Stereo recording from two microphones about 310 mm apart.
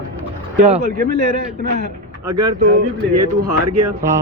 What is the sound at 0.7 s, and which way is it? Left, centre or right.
Speech, right.